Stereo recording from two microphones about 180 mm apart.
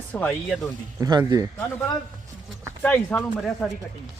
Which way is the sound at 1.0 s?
25° right (ahead or behind).